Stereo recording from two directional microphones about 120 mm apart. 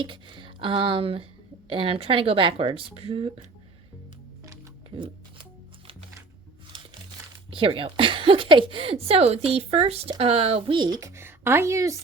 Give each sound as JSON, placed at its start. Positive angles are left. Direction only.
{"t": 0.0, "sound": "a woman's voice", "side_deg": -45}
{"t": 4.9, "sound": "music", "side_deg": -45}
{"t": 7.5, "sound": "a woman's voice", "side_deg": -50}
{"t": 10.8, "sound": "speech", "side_deg": -35}
{"t": 11.1, "sound": "a woman's voice", "side_deg": -20}